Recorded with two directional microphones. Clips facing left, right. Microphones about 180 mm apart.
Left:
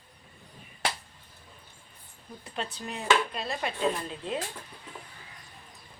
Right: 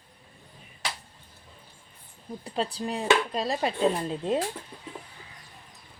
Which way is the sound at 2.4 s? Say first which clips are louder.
Right 6 dB; 30° right (ahead or behind).